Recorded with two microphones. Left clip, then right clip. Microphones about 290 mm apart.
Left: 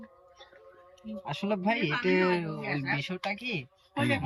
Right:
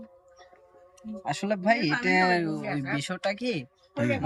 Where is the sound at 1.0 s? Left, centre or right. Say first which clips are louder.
Right 5 dB; centre.